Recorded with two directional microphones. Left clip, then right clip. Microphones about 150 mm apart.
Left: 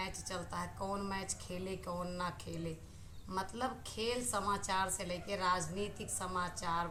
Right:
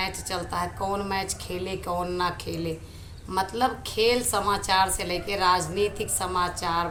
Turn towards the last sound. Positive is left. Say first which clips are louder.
# right 12 dB
turn(degrees=-15)  # may be behind; listen again after turning